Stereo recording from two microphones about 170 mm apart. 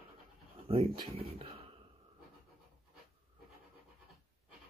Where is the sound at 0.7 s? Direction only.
35° right (ahead or behind).